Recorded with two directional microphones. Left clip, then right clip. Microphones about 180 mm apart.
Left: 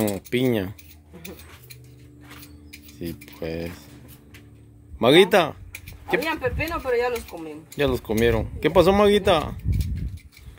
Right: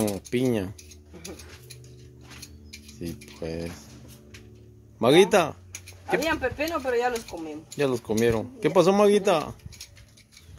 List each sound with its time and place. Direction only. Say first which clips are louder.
0.0 s speech: left 3 dB; 5° left (ahead or behind)
3.0 s speech: left 3 dB; 5° left (ahead or behind)
4.9 s speech: left 3 dB; centre (ahead or behind)